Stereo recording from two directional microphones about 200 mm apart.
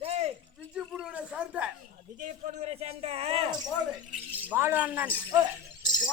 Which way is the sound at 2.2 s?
35° right (ahead or behind).